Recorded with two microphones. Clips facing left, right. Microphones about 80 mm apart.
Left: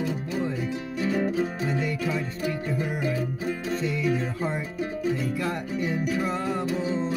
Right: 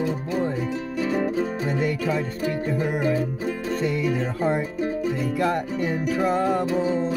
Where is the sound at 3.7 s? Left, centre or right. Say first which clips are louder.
Right 2 dB; right.